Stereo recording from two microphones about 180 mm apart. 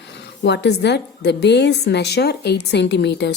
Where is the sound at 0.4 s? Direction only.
70° left (ahead or behind).